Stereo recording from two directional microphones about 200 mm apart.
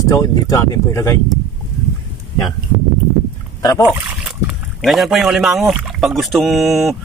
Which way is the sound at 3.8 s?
10° right (ahead or behind).